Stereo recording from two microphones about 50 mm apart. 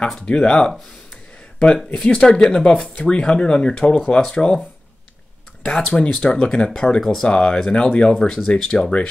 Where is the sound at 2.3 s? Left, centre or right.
Centre.